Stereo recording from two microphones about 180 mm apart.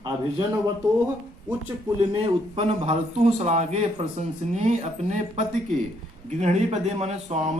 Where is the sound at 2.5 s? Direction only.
35° right (ahead or behind).